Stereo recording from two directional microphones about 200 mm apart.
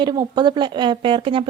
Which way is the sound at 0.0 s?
20° right (ahead or behind).